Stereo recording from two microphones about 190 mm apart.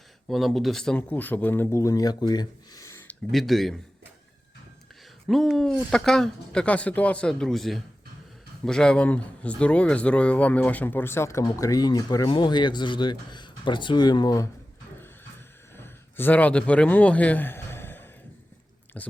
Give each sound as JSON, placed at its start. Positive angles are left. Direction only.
{"t": 0.3, "sound": "speech", "side_deg": 0}
{"t": 3.3, "sound": "speech", "side_deg": 0}
{"t": 5.3, "sound": "speech", "side_deg": 0}
{"t": 15.7, "sound": "a sound", "side_deg": 10}
{"t": 19.0, "sound": "speech", "side_deg": 10}